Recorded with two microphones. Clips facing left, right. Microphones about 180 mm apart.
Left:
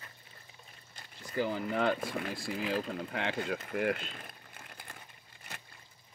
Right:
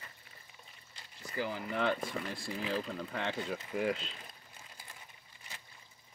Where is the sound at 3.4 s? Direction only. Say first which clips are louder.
Left 2 dB; 60° left (ahead or behind).